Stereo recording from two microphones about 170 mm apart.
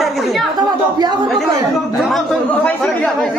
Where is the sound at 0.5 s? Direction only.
25° right (ahead or behind).